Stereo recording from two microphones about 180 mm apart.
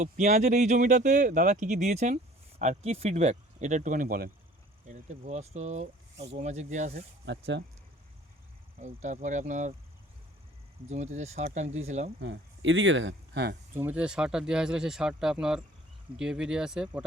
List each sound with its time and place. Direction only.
0.0 s speech: 40° right (ahead or behind)
7.3 s speech: 80° right
8.8 s speech: 40° right (ahead or behind)
10.8 s speech: 40° right (ahead or behind)
12.2 s speech: 90° right; by 13.6 s 65° right (ahead or behind)
13.7 s speech: 10° right (ahead or behind)